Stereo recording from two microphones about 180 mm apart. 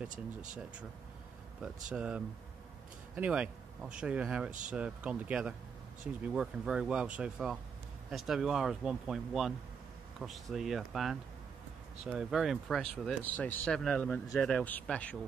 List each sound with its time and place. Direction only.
1.6 s speech: 5° right (ahead or behind)